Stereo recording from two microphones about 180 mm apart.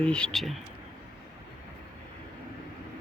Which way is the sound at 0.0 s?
5° left (ahead or behind).